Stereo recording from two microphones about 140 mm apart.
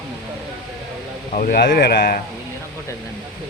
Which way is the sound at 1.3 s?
90° left.